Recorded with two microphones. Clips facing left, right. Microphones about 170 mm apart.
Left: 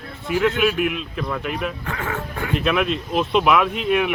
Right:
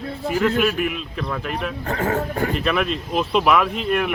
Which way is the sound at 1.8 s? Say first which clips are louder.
Right 5 dB; 40° right (ahead or behind).